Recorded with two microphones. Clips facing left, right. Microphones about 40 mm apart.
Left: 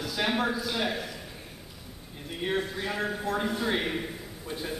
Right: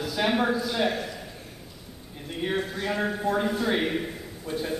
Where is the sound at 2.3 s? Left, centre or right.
Centre.